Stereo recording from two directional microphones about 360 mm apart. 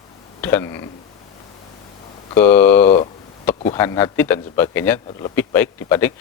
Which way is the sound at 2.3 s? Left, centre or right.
Centre.